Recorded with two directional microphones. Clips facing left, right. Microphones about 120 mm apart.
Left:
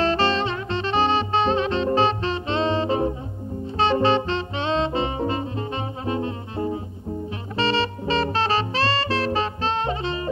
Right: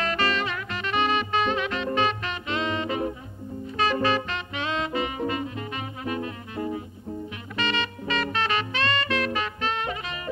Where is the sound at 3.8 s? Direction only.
30° left (ahead or behind).